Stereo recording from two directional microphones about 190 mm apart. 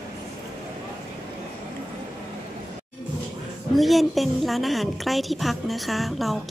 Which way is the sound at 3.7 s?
Centre (ahead or behind).